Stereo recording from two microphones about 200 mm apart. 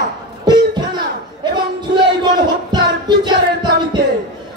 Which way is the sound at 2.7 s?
20° right (ahead or behind).